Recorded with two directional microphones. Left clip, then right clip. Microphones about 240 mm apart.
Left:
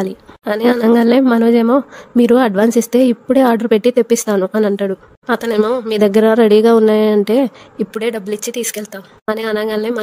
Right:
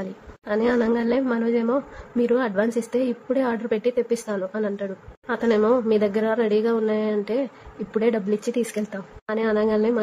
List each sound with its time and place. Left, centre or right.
0.0 s a woman's voice: left